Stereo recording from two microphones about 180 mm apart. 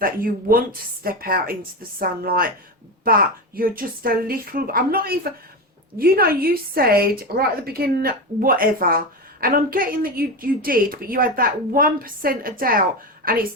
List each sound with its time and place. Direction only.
0.0 s speech: 50° right (ahead or behind)